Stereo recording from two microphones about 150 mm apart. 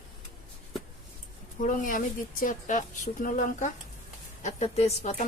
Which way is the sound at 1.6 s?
65° left (ahead or behind).